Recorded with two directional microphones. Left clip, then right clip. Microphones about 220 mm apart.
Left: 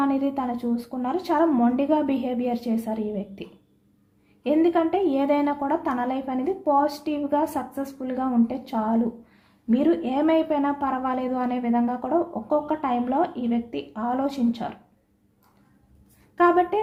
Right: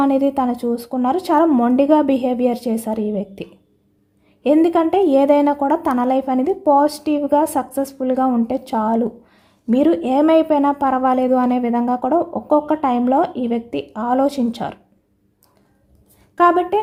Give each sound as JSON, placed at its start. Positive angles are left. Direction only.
{"t": 0.0, "sound": "a woman's voice", "side_deg": -50}
{"t": 16.3, "sound": "a woman's voice", "side_deg": -45}